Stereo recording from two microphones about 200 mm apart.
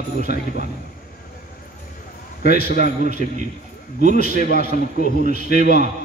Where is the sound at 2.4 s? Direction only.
50° left (ahead or behind).